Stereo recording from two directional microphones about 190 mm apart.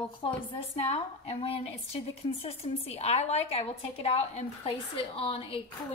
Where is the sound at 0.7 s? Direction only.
30° left (ahead or behind).